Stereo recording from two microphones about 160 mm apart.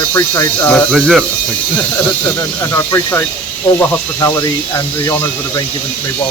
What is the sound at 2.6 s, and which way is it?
Speech, 15° left (ahead or behind).